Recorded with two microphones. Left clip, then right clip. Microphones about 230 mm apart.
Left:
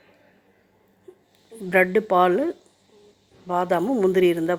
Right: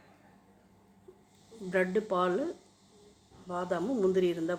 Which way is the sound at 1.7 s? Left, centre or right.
Left.